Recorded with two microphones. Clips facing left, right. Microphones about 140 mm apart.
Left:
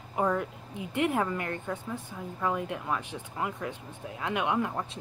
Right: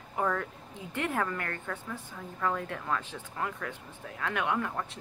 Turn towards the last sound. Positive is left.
turn(degrees=20)  # may be behind; listen again after turning